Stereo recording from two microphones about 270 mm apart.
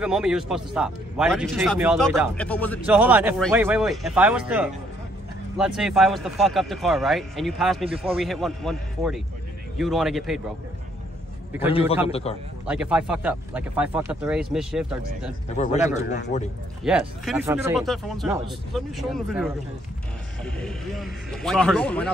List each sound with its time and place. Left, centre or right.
0.0 s speech: centre
2.9 s speech: centre
12.1 s a man's voice: left
12.6 s speech: centre
15.5 s a man's voice: left
16.8 s speech: centre